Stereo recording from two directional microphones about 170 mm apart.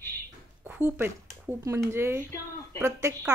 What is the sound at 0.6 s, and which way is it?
Speech, 10° right (ahead or behind).